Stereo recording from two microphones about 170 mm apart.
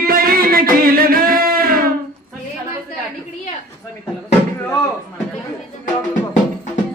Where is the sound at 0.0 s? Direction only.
60° right (ahead or behind).